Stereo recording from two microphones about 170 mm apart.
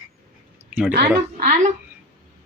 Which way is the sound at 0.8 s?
10° right (ahead or behind).